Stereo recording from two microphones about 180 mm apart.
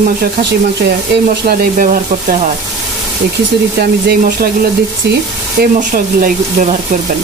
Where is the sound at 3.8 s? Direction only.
60° right (ahead or behind).